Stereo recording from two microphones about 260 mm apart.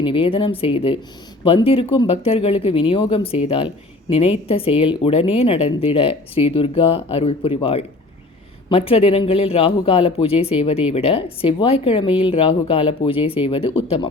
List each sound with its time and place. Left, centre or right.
0.0 s speech: left